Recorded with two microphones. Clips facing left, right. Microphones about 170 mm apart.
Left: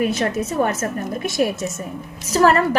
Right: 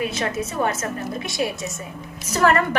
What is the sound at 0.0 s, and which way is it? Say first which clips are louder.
Speech: left 4 dB; 45° left (ahead or behind).